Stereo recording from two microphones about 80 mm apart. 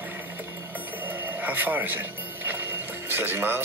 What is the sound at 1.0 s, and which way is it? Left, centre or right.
Music, right.